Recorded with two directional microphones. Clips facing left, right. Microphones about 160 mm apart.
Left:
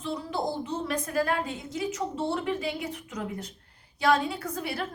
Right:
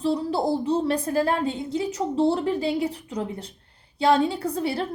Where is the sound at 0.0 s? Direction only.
35° right (ahead or behind).